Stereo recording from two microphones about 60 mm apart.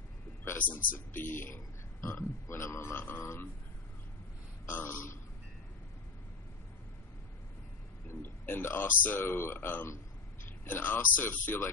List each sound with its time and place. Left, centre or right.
0.6 s speech: left
4.6 s speech: left
8.2 s speech: left